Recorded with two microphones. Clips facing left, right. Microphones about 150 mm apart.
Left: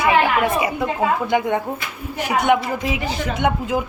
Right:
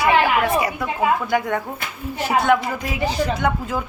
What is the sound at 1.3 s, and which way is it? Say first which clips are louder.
Speech: left 2 dB; 20° left (ahead or behind).